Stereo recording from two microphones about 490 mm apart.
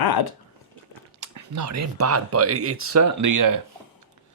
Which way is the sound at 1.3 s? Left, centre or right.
Right.